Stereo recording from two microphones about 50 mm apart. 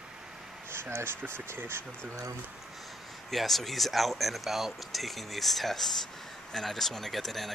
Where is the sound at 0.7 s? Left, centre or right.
Right.